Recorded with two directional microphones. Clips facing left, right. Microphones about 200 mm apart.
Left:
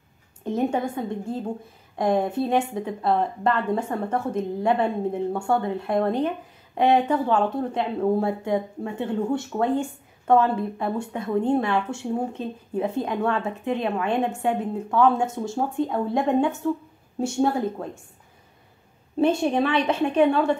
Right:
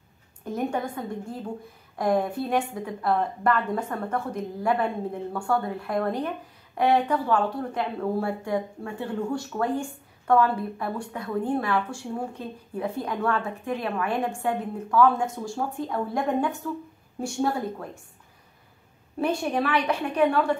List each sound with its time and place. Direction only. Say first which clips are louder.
0.4 s speech: left 4 dB; 25° left (ahead or behind)
19.1 s speech: left 5 dB; 25° left (ahead or behind)